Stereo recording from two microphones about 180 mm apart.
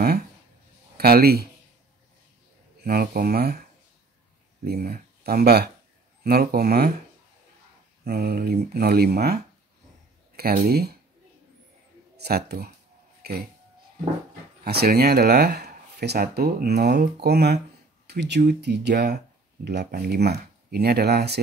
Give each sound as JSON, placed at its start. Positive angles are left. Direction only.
{"t": 0.9, "sound": "speech", "side_deg": -60}
{"t": 2.8, "sound": "speech", "side_deg": -55}
{"t": 4.6, "sound": "speech", "side_deg": -60}
{"t": 8.0, "sound": "speech", "side_deg": -60}
{"t": 12.2, "sound": "speech", "side_deg": -65}
{"t": 14.6, "sound": "speech", "side_deg": -60}